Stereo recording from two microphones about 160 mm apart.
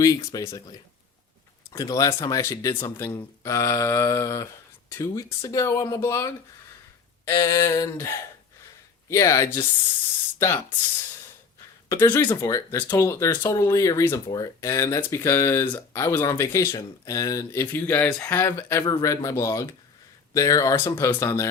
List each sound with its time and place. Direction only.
0.3 s speech: 20° left (ahead or behind)
11.9 s speech: 15° left (ahead or behind)